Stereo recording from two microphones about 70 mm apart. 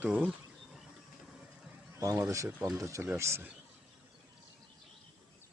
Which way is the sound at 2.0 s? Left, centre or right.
Right.